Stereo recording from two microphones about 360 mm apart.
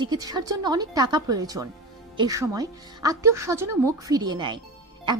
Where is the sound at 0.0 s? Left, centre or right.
Centre.